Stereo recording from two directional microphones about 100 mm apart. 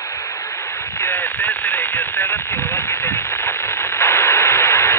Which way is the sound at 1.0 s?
20° left (ahead or behind).